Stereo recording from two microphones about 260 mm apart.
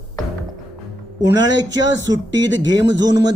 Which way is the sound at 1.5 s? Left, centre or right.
Right.